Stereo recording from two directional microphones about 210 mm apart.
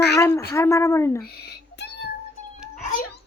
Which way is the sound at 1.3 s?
50° left (ahead or behind).